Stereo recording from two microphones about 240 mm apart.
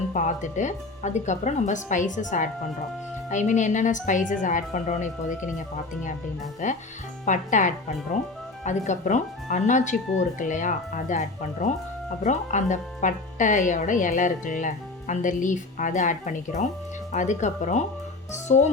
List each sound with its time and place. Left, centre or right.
0.1 s a woman's voice: left
6.6 s a woman's voice: left